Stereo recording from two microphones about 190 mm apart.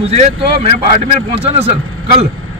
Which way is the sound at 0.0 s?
30° right (ahead or behind).